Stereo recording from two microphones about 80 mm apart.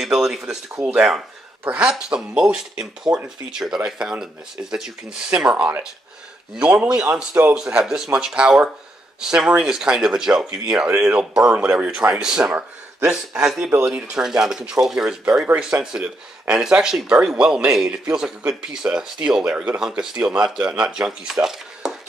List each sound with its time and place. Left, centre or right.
0.0 s speech: centre
13.7 s speech: right
14.1 s speech: centre